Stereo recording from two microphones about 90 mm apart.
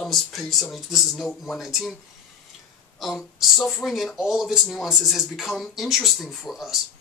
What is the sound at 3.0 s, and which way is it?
Speech, centre (ahead or behind).